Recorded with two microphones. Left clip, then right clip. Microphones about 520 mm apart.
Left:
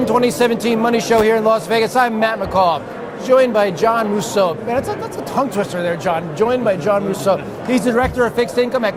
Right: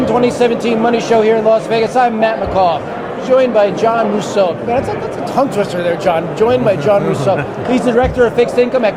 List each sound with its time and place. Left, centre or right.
0.2 s a man's voice: left